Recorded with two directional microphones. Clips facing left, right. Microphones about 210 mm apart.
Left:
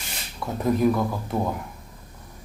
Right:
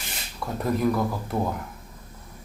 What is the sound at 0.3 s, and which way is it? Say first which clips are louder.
Speech: left 3 dB; centre (ahead or behind).